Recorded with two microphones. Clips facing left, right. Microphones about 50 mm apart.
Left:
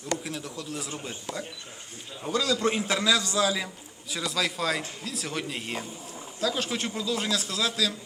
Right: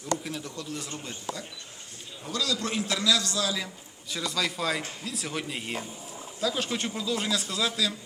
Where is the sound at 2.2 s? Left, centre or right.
Left.